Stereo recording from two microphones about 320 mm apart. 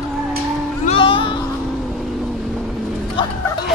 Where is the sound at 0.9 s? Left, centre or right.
Centre.